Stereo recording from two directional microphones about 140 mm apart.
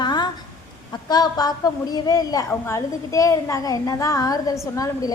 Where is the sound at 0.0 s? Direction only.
30° left (ahead or behind).